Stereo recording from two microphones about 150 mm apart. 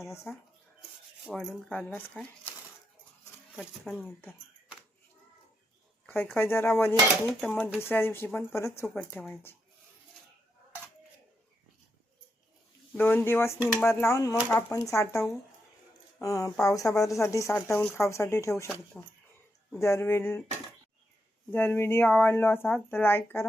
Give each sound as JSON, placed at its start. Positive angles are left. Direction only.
{"t": 0.3, "sound": "speech", "side_deg": 15}
{"t": 0.8, "sound": "rub", "side_deg": 0}
{"t": 2.1, "sound": "a sound", "side_deg": 15}
{"t": 3.5, "sound": "speech", "side_deg": 0}
{"t": 6.1, "sound": "speech", "side_deg": 15}
{"t": 12.9, "sound": "speech", "side_deg": 10}
{"t": 19.7, "sound": "speech", "side_deg": 15}
{"t": 21.5, "sound": "speech", "side_deg": 15}